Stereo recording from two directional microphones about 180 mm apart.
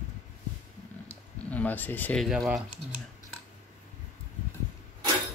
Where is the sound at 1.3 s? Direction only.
10° left (ahead or behind).